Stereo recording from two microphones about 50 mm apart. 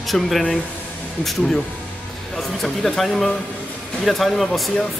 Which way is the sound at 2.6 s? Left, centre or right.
Centre.